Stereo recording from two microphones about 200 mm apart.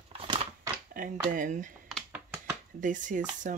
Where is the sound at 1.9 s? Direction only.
5° right (ahead or behind).